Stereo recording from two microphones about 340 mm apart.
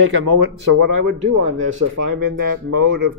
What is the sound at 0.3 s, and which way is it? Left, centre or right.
Speech, right.